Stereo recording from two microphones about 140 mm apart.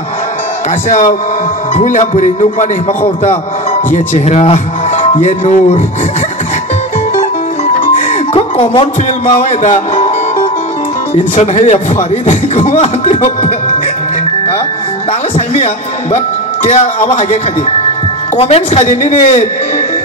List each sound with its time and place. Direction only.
0.8 s music: 60° left (ahead or behind)
3.9 s speech: 55° left (ahead or behind)
7.2 s music: 65° left (ahead or behind)
8.3 s speech: 45° left (ahead or behind)
9.4 s speech: 55° left (ahead or behind)
11.3 s speech: 55° left (ahead or behind)
13.0 s music: 55° left (ahead or behind)
15.3 s music: 50° left (ahead or behind)
16.6 s speech: 55° left (ahead or behind)
18.3 s music: 45° left (ahead or behind)